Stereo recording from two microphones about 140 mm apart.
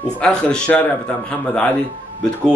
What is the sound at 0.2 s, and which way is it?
Speech, 5° left (ahead or behind).